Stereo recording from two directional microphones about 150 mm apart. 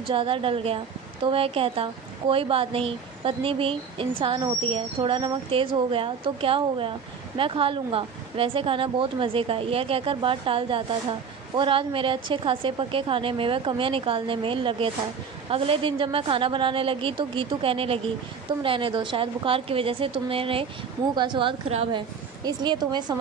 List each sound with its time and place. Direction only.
0.1 s a woman's voice: 35° right (ahead or behind)
21.9 s speech: 25° right (ahead or behind)